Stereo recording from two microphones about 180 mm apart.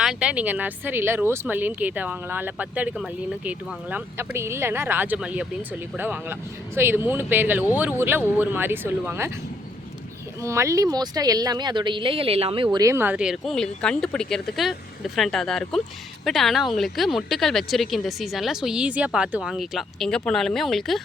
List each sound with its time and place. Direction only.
0.0 s speech: 5° right (ahead or behind)
10.4 s a woman's voice: 15° right (ahead or behind); by 21.0 s centre (ahead or behind)